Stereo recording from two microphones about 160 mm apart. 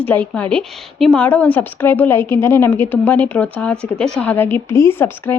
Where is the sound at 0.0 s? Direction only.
10° left (ahead or behind).